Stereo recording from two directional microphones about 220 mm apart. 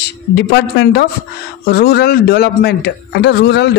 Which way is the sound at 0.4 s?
55° left (ahead or behind).